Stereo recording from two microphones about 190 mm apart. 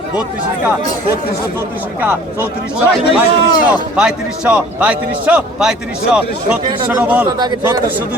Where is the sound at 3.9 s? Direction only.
5° right (ahead or behind).